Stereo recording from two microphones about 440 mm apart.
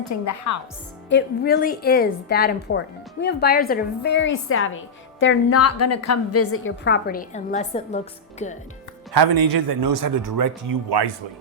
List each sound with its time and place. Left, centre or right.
0.1 s a woman's voice: left
1.1 s a woman's voice: left
9.1 s a man's voice: right